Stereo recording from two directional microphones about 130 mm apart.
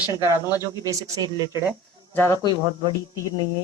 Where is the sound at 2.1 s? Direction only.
20° left (ahead or behind).